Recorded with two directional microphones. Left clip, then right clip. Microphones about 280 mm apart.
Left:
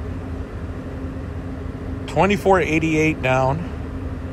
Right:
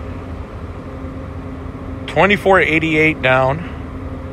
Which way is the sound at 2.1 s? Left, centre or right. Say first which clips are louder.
Right 5 dB; centre.